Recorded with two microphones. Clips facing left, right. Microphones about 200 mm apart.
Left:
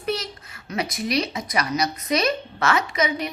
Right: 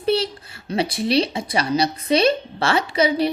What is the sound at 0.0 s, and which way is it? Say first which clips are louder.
A child's voice: right 7 dB; 30° right (ahead or behind).